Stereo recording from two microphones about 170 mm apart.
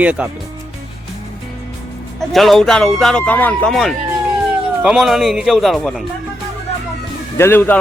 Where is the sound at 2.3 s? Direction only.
Centre (ahead or behind).